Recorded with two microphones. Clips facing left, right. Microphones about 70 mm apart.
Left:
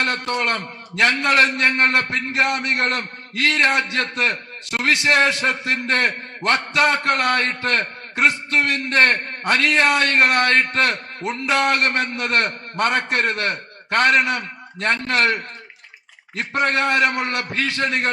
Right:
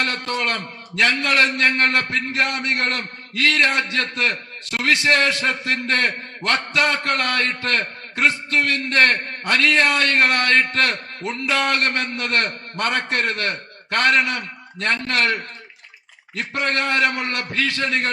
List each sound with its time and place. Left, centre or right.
0.0 s a man's voice: left